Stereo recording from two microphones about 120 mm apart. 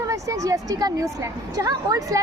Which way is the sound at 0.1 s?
25° right (ahead or behind).